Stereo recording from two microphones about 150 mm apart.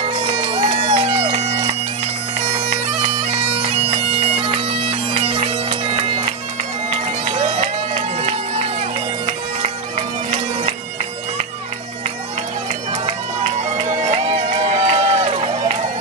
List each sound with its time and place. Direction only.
0.0 s bagpipes: 40° right (ahead or behind)
6.9 s run: 45° right (ahead or behind)
13.0 s run: 45° right (ahead or behind)